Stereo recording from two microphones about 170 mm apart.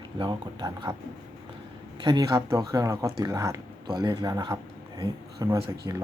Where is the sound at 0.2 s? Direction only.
25° right (ahead or behind).